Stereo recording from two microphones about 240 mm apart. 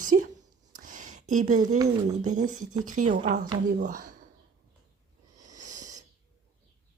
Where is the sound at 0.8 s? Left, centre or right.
Right.